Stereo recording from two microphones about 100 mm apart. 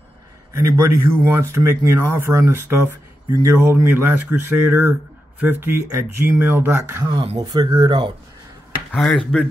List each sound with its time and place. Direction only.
0.5 s speech: 30° right (ahead or behind)
7.3 s speech: 40° right (ahead or behind)
9.1 s speech: 5° left (ahead or behind)